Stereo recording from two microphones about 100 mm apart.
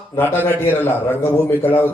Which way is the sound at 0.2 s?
20° left (ahead or behind).